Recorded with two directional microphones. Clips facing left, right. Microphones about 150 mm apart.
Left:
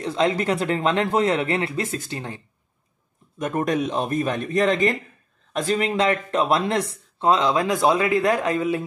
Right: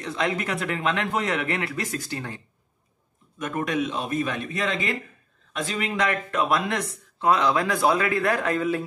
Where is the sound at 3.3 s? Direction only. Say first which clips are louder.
Left 3 dB; 40° left (ahead or behind).